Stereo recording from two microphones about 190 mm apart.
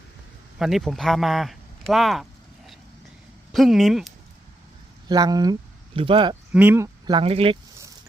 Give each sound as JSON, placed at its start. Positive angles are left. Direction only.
{"t": 0.6, "sound": "speech", "side_deg": 0}
{"t": 3.5, "sound": "speech", "side_deg": 0}
{"t": 5.0, "sound": "speech", "side_deg": -20}
{"t": 6.5, "sound": "speech", "side_deg": -10}
{"t": 7.2, "sound": "speech", "side_deg": -30}